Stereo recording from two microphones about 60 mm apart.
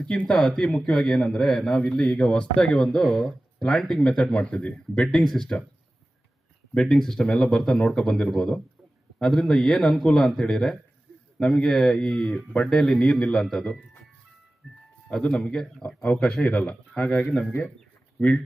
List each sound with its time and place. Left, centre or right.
0.3 s a man's voice: centre
5.0 s speech: centre
6.7 s a man's voice: centre
14.6 s speech: centre
15.1 s a man's voice: centre